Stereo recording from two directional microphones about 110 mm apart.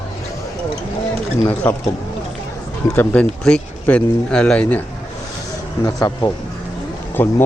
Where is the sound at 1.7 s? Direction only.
15° left (ahead or behind).